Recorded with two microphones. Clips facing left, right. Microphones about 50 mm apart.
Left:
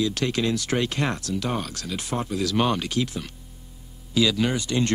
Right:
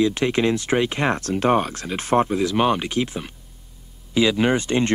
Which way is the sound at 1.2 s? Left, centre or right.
Right.